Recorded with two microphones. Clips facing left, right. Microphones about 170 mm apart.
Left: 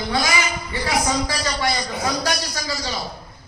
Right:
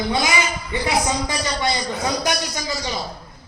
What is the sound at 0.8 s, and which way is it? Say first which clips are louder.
A man's voice: even; 20° right (ahead or behind).